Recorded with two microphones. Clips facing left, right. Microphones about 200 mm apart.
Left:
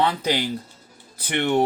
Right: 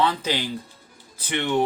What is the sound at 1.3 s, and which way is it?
Speech, 50° left (ahead or behind).